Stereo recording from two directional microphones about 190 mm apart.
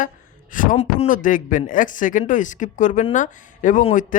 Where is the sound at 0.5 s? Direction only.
45° left (ahead or behind).